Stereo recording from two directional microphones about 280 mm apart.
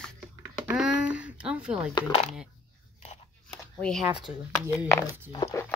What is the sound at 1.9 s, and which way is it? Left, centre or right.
Speech, left.